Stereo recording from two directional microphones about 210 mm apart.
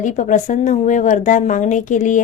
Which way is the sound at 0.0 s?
35° left (ahead or behind).